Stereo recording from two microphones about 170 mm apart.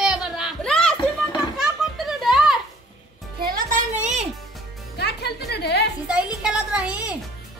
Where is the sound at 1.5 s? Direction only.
Centre (ahead or behind).